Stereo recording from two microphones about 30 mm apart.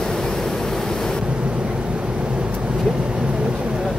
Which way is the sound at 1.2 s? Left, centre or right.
Right.